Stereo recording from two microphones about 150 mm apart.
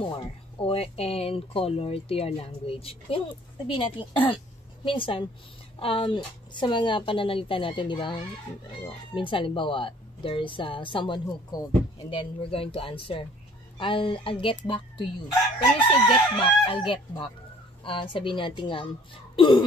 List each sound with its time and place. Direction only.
0.6 s speech: 40° left (ahead or behind)
16.1 s speech: 35° left (ahead or behind)